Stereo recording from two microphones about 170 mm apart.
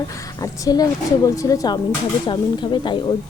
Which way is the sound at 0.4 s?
20° left (ahead or behind).